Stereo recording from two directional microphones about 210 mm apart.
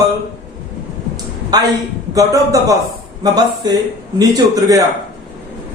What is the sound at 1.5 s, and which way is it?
A man's voice, 20° right (ahead or behind).